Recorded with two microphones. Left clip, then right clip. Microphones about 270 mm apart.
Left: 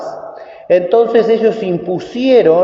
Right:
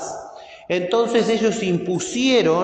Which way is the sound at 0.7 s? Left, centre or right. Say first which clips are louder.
Left 9 dB; right.